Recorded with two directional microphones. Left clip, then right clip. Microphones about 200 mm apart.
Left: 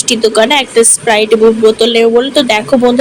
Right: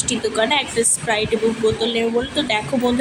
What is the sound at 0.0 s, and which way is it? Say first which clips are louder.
A woman's voice: left 11 dB; 25° left (ahead or behind).